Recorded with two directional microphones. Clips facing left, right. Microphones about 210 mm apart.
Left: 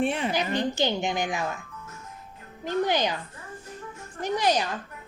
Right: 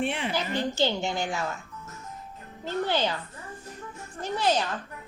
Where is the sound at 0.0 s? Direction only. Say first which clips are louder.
Left 3 dB; 40° left (ahead or behind).